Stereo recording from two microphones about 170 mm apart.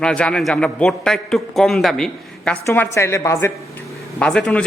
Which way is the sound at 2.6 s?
15° left (ahead or behind).